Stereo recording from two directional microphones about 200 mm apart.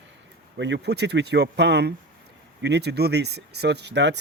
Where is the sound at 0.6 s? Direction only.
60° right (ahead or behind).